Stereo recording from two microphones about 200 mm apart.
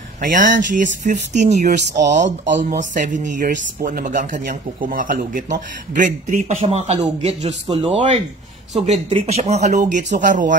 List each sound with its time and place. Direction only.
0.2 s a man's voice: 40° right (ahead or behind)
2.4 s speech: 60° right (ahead or behind)
2.9 s a man's voice: 40° right (ahead or behind)